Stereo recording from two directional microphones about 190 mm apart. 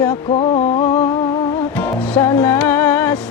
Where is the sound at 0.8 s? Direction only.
15° left (ahead or behind).